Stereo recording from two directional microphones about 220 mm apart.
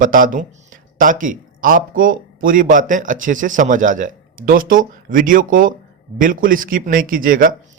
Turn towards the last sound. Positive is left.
turn(degrees=-40)  # may be behind; listen again after turning